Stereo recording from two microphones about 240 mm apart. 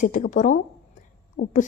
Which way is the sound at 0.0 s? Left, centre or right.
Left.